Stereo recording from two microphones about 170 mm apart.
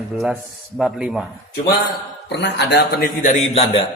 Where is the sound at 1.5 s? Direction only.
65° left (ahead or behind).